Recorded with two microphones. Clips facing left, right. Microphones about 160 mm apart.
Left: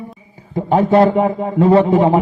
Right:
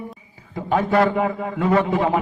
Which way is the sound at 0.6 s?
30° left (ahead or behind).